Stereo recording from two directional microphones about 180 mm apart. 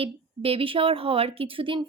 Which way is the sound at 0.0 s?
30° right (ahead or behind).